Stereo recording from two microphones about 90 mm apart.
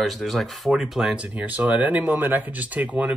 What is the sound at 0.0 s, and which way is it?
Speech, centre (ahead or behind).